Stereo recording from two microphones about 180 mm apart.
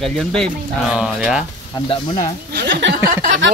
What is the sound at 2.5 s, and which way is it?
Speech, 80° right.